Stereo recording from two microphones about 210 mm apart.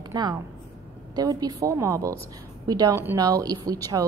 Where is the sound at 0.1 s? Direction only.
20° right (ahead or behind).